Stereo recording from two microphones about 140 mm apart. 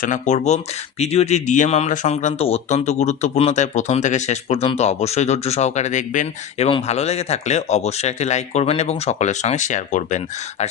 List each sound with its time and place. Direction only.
0.0 s speech: 60° left (ahead or behind)
6.8 s speech: 50° left (ahead or behind)